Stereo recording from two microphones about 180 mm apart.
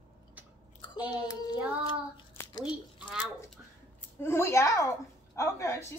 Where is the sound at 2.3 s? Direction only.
15° left (ahead or behind).